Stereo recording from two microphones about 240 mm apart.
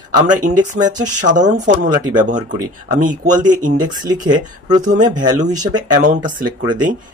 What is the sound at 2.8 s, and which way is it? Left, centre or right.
Speech, right.